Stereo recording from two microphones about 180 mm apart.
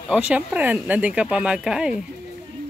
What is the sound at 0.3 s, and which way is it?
Speech, 10° right (ahead or behind).